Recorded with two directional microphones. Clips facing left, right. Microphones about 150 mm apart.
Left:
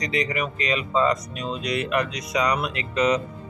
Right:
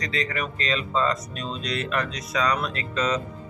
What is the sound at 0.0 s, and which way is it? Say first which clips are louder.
Speech: left 3 dB; 15° left (ahead or behind).